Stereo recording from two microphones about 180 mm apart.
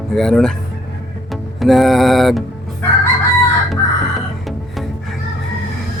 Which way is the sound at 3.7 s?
Centre (ahead or behind).